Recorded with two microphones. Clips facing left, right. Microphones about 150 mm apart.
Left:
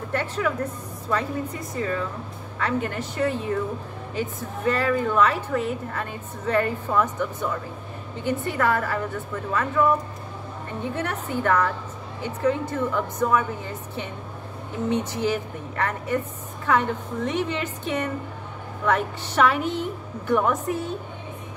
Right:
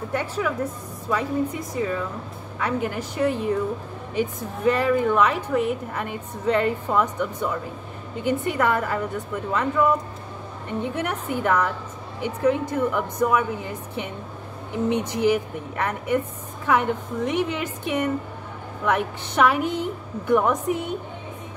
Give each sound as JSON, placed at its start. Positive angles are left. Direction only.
{"t": 0.1, "sound": "a woman's voice", "side_deg": -10}
{"t": 11.0, "sound": "a woman's voice", "side_deg": -15}
{"t": 14.9, "sound": "a woman's voice", "side_deg": -15}